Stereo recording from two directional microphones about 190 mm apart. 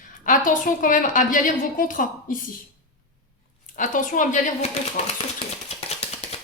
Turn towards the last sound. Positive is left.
turn(degrees=35)  # may be behind; listen again after turning